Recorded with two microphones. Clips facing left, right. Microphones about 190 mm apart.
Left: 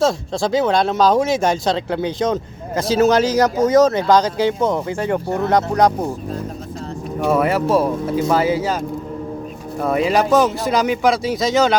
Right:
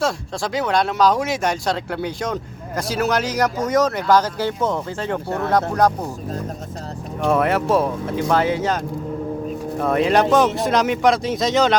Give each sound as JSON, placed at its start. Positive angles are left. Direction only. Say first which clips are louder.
{"t": 0.0, "sound": "speech", "louder": "left 5 dB", "side_deg": 25}
{"t": 7.2, "sound": "speech", "louder": "left 1 dB", "side_deg": 0}
{"t": 9.8, "sound": "speech", "louder": "even", "side_deg": 0}